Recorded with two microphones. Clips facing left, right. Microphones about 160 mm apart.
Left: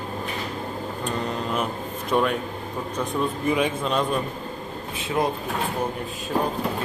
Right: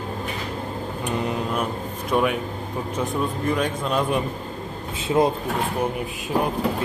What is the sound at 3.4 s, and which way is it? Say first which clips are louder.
Speech: left 1 dB; 5° left (ahead or behind).